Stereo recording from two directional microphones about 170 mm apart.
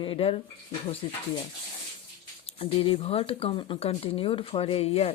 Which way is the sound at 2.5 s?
30° left (ahead or behind).